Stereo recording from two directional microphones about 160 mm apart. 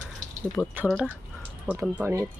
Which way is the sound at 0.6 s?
10° left (ahead or behind).